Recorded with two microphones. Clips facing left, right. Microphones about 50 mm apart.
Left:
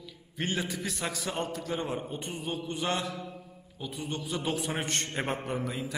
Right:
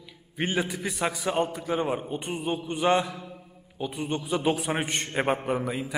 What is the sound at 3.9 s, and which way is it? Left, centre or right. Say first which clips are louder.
A man's voice: right 5 dB; right.